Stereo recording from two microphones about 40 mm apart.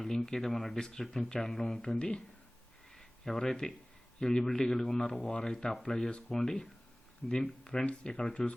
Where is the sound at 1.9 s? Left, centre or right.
Left.